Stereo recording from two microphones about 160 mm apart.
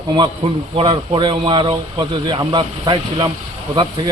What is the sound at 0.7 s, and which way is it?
Speech, 30° right (ahead or behind).